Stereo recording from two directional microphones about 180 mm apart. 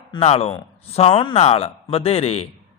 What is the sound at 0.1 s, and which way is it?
Speech, 35° left (ahead or behind).